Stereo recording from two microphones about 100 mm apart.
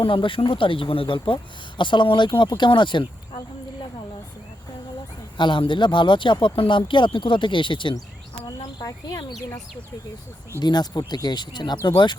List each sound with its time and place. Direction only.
0.0 s speech: 60° left (ahead or behind)
5.4 s speech: 50° left (ahead or behind)
8.4 s insect: 45° left (ahead or behind)
10.6 s speech: 45° left (ahead or behind)